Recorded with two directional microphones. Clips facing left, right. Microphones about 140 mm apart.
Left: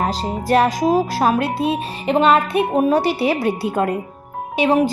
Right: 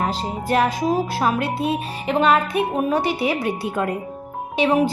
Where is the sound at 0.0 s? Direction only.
35° left (ahead or behind).